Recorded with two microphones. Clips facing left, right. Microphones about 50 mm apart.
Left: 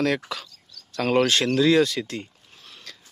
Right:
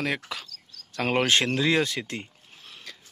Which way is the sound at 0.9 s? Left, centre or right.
Right.